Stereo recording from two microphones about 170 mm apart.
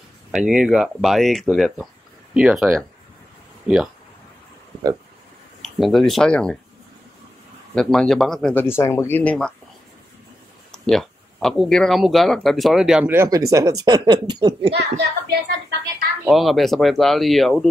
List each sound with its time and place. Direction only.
0.3 s speech: 5° right (ahead or behind)
5.6 s speech: centre (ahead or behind)
7.7 s speech: centre (ahead or behind)
8.6 s speech: 15° left (ahead or behind)
10.7 s speech: 5° left (ahead or behind); by 14.7 s 25° right (ahead or behind)
14.7 s speech: 85° right
16.3 s speech: centre (ahead or behind)